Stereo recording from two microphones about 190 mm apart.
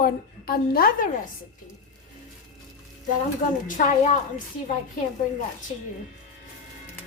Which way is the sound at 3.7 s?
40° left (ahead or behind).